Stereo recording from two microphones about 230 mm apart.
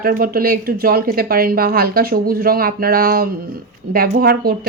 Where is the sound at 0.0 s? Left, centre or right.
Right.